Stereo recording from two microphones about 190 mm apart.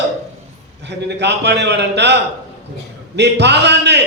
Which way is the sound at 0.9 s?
65° right (ahead or behind).